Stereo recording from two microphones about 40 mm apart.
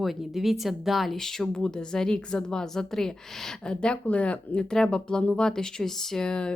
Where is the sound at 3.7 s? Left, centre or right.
Left; by 6.2 s centre.